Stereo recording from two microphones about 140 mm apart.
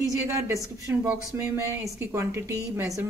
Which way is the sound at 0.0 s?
25° right (ahead or behind).